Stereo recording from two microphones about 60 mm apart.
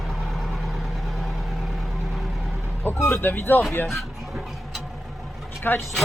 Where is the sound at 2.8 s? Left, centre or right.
Left.